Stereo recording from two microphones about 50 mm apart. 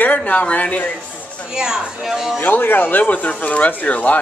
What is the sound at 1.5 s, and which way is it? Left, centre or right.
Speech, centre.